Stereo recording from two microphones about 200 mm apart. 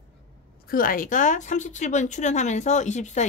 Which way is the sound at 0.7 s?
45° left (ahead or behind).